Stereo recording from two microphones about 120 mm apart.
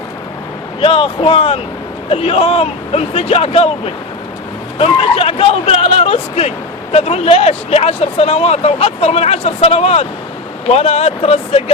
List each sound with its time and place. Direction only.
0.8 s speech: 50° left (ahead or behind)